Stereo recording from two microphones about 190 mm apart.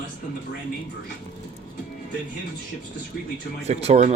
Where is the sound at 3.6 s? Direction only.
35° right (ahead or behind).